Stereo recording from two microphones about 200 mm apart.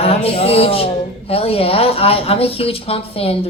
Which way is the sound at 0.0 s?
30° left (ahead or behind).